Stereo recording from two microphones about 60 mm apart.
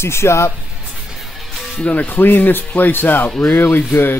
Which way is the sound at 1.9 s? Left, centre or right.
Left.